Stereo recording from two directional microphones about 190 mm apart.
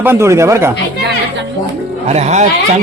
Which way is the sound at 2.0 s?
35° right (ahead or behind).